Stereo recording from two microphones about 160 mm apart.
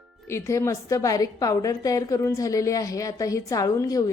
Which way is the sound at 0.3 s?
15° left (ahead or behind).